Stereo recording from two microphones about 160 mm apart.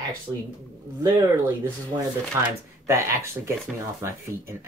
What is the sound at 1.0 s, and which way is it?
Speech, 20° right (ahead or behind).